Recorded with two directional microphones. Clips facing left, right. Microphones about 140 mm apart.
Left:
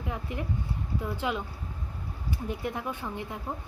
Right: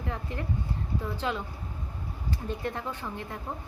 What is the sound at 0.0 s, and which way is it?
Speech, 15° left (ahead or behind).